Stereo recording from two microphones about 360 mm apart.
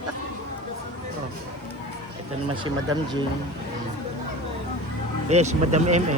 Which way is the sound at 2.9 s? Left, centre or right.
Centre.